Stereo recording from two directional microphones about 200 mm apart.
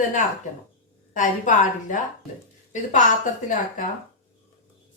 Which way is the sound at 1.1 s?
40° left (ahead or behind).